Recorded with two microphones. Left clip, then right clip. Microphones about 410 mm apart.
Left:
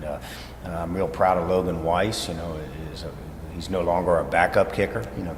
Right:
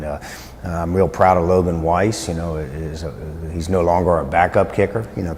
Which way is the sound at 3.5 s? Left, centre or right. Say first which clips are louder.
Right 7 dB; right.